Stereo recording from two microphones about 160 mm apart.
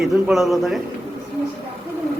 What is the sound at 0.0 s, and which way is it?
Speech, centre (ahead or behind).